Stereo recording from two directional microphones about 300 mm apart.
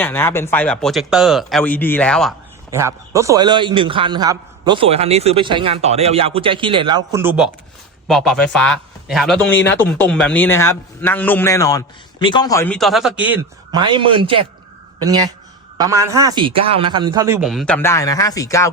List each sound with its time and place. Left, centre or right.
0.0 s speech: centre
2.6 s a man's voice: centre